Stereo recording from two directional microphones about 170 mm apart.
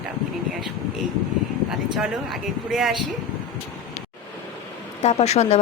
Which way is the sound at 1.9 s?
Centre (ahead or behind).